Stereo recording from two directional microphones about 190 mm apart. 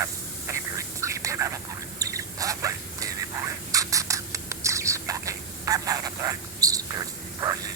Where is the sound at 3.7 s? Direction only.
15° right (ahead or behind).